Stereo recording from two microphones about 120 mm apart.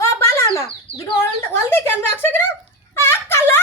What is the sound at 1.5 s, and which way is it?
A child's voice, 20° left (ahead or behind).